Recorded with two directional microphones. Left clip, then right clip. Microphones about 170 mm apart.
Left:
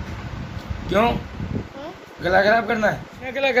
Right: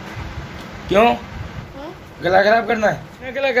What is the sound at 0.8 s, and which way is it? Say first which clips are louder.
Speech: right 5 dB; 15° right (ahead or behind).